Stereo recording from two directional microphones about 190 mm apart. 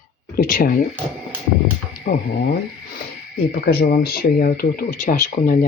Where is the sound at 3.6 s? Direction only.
55° left (ahead or behind).